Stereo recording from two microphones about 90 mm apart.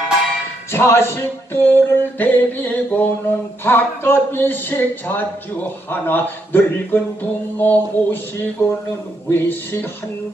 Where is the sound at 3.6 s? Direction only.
25° left (ahead or behind).